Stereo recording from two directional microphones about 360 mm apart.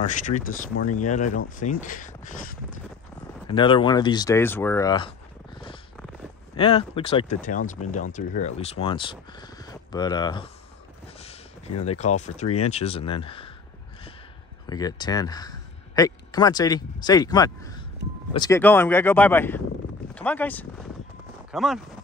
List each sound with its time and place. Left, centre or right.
0.0 s speech: left
6.5 s speech: centre
11.1 s a sound: centre
12.0 s speech: centre
14.7 s speech: centre